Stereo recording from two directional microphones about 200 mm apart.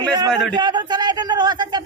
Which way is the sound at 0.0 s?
20° right (ahead or behind).